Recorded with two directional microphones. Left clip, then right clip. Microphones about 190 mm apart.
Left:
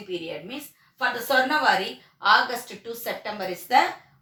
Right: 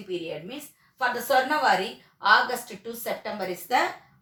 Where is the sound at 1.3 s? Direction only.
25° right (ahead or behind).